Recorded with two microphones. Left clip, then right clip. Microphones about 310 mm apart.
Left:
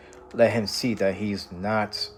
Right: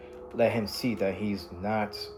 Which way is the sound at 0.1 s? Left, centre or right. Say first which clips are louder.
Left 5 dB; left.